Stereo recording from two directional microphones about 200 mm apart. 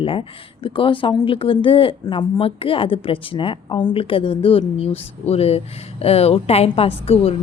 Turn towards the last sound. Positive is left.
turn(degrees=30)  # may be behind; listen again after turning